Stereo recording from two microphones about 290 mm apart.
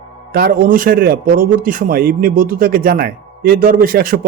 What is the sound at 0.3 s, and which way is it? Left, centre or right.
A man's voice, right.